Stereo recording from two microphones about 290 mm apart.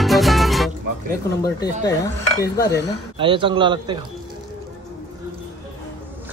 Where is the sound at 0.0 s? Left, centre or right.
Centre.